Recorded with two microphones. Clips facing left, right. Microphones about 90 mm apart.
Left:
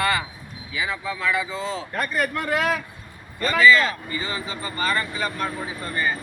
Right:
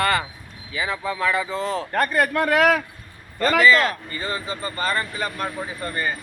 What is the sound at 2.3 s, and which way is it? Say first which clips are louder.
Speech: right 5 dB; 90° right.